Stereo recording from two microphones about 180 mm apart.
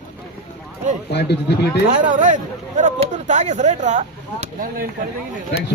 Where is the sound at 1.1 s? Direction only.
70° left (ahead or behind).